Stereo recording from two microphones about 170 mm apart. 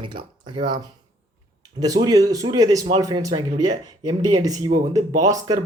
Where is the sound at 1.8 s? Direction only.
20° right (ahead or behind).